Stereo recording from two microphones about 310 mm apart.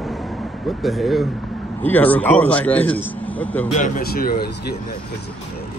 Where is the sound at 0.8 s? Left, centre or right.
Centre.